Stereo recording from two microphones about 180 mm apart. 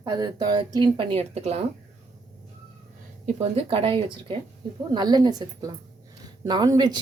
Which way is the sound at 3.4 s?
35° right (ahead or behind).